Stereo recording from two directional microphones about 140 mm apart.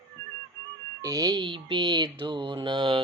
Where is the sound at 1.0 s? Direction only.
25° right (ahead or behind).